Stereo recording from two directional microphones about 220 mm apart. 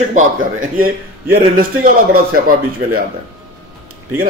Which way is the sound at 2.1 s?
40° right (ahead or behind).